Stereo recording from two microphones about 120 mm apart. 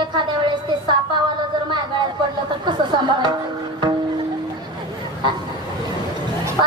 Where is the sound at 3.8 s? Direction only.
40° right (ahead or behind).